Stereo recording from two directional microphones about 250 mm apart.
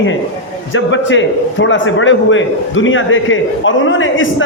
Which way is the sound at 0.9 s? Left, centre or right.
Left.